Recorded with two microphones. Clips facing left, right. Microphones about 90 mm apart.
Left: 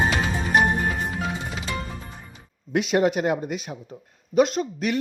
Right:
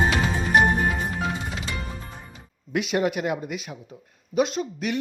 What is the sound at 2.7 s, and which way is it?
Speech, 35° left (ahead or behind).